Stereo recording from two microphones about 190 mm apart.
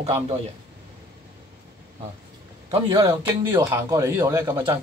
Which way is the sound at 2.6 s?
30° right (ahead or behind).